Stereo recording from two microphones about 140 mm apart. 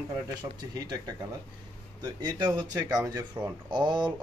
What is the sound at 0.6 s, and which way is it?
Speech, 30° right (ahead or behind).